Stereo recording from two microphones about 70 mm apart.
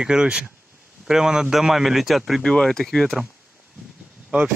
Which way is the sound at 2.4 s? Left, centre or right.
Centre.